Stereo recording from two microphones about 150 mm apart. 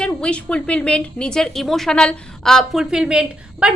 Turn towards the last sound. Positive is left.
turn(degrees=-5)  # may be behind; listen again after turning